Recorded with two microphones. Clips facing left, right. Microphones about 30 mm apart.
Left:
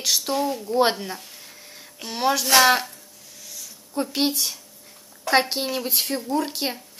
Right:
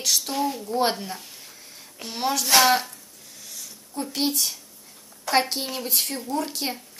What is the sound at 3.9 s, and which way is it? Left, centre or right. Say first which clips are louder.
Speech: left 3 dB; left.